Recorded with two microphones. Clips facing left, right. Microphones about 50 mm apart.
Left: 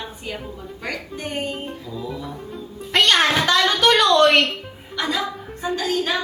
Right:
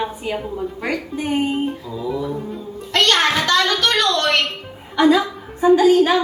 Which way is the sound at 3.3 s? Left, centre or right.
Centre.